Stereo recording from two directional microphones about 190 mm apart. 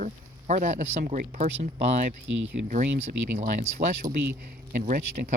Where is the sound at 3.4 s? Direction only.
40° right (ahead or behind).